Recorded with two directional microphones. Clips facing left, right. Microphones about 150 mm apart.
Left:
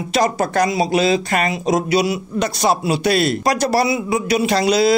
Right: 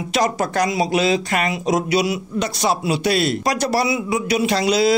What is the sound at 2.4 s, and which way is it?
Speech, 45° left (ahead or behind).